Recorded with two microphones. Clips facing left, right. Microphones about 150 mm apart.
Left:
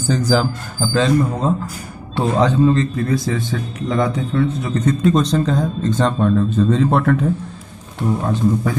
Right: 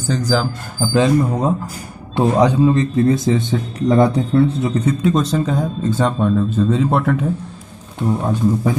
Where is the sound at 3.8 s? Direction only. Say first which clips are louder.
Right 5 dB; 35° right (ahead or behind).